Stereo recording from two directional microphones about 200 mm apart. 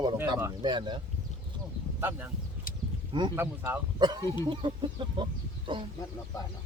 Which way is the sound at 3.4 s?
10° right (ahead or behind).